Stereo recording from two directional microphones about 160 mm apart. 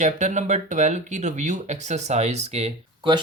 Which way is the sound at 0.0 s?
50° right (ahead or behind).